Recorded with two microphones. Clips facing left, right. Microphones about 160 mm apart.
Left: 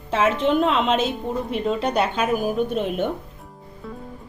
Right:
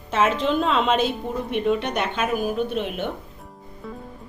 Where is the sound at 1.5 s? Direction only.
30° left (ahead or behind).